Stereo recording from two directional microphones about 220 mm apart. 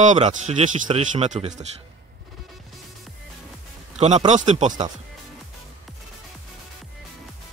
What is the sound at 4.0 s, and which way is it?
Speech, 30° right (ahead or behind).